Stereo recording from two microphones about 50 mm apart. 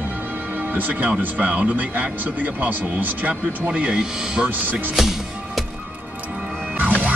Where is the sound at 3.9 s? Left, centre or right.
Centre.